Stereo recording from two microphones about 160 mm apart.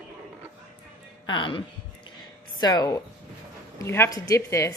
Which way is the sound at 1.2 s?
30° left (ahead or behind).